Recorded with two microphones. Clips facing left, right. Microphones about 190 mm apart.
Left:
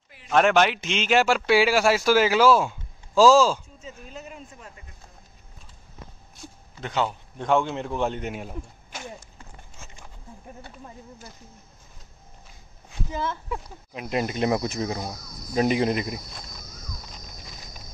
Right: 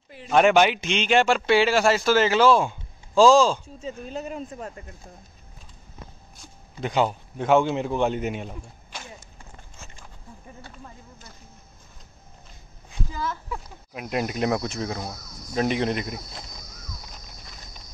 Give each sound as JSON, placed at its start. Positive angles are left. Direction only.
{"t": 0.3, "sound": "speech", "side_deg": 0}
{"t": 3.6, "sound": "speech", "side_deg": -30}
{"t": 6.8, "sound": "speech", "side_deg": -15}
{"t": 13.1, "sound": "speech", "side_deg": 25}
{"t": 13.9, "sound": "speech", "side_deg": 0}